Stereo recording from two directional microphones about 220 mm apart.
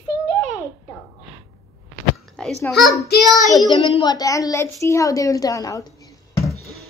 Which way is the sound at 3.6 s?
20° left (ahead or behind).